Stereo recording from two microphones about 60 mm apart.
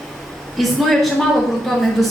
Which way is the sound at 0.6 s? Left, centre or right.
Centre.